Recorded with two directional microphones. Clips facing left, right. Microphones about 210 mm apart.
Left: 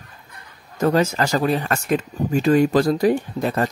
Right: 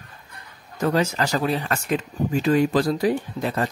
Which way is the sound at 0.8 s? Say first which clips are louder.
Left 3 dB; 45° left (ahead or behind).